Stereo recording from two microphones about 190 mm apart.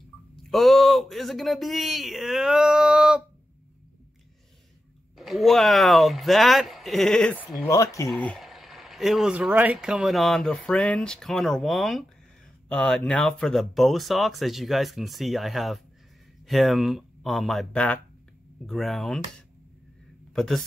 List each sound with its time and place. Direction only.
0.5 s speech: centre (ahead or behind)
5.1 s speech: centre (ahead or behind)
7.7 s speech: 15° left (ahead or behind)
8.1 s speech: 5° left (ahead or behind)
20.3 s speech: centre (ahead or behind)